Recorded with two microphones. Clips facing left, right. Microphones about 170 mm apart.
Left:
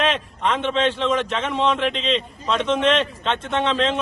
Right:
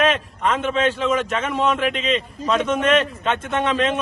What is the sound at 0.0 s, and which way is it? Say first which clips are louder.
A man's voice: right 2 dB; 5° right (ahead or behind).